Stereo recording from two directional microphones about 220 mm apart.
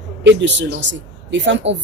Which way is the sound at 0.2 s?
55° right (ahead or behind).